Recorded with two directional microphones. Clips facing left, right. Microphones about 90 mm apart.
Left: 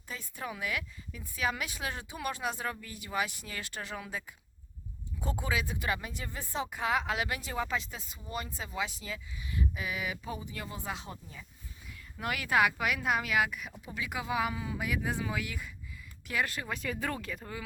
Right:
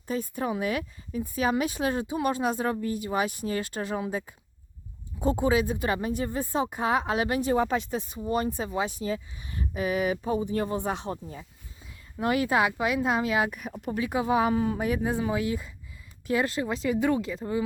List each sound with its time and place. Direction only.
0.1 s speech: 40° right (ahead or behind)
12.1 s speech: 30° right (ahead or behind)
13.5 s speech: 45° right (ahead or behind)
13.7 s speech: 65° right (ahead or behind)
14.0 s speech: 30° right (ahead or behind)